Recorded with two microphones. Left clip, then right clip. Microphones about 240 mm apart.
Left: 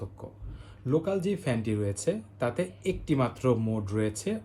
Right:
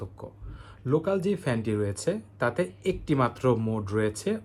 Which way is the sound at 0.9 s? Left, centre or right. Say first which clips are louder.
Right 2 dB; centre.